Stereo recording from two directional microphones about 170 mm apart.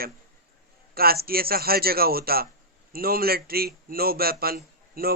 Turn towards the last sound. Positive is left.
turn(degrees=-60)  # may be behind; listen again after turning